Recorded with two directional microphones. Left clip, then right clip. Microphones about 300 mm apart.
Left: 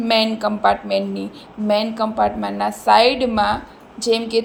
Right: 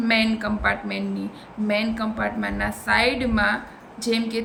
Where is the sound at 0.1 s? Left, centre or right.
Centre.